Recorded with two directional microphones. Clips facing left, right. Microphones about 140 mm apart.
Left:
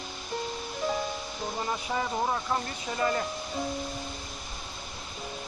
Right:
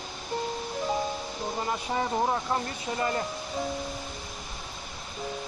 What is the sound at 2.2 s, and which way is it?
Speech, 15° right (ahead or behind).